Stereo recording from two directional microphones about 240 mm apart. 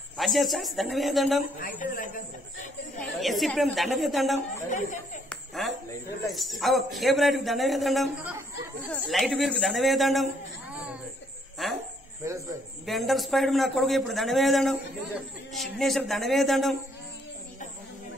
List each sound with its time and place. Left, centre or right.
0.2 s a man's voice: centre
1.6 s a man's voice: left
3.0 s a man's voice: centre
4.6 s a man's voice: left
5.3 s a sound: centre
6.3 s a man's voice: centre
11.6 s speech: centre
12.2 s speech: centre
12.8 s a man's voice: centre